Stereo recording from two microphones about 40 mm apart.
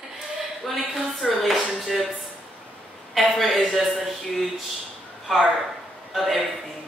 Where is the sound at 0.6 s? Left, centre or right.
Centre.